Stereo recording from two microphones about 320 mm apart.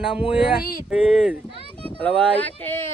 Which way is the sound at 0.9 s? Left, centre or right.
Centre.